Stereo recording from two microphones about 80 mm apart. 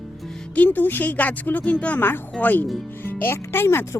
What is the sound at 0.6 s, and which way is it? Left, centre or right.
A woman's voice, left.